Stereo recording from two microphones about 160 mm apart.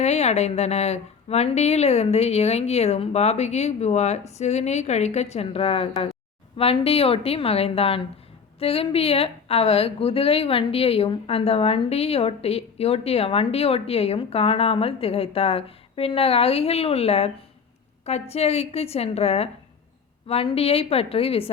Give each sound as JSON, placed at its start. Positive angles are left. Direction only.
{"t": 0.0, "sound": "a woman's voice", "side_deg": 45}